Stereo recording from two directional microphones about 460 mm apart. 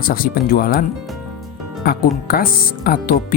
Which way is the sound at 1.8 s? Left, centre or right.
Centre.